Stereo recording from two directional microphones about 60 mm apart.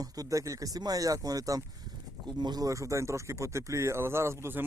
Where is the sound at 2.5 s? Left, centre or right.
Right.